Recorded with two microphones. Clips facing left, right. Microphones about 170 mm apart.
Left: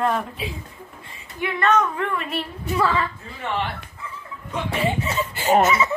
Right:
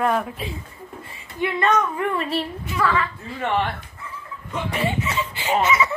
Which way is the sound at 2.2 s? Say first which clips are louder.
Right 3 dB; 35° right (ahead or behind).